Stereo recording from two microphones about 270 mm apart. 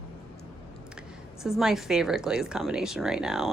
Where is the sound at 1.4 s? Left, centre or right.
Centre.